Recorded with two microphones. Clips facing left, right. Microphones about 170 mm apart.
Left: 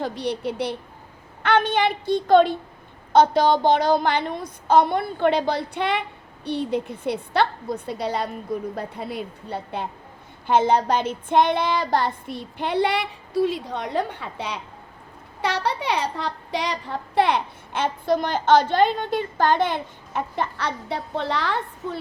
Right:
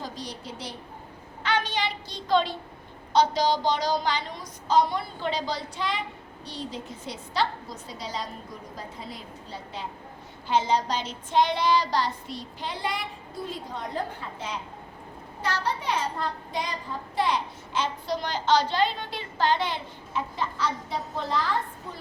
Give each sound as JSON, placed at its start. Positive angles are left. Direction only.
{"t": 0.0, "sound": "child singing", "side_deg": 65}
{"t": 1.4, "sound": "a woman's voice", "side_deg": 55}
{"t": 3.1, "sound": "child singing", "side_deg": 55}